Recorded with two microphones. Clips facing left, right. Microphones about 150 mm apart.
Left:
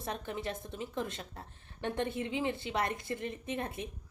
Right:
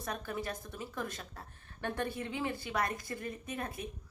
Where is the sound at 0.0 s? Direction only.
25° left (ahead or behind).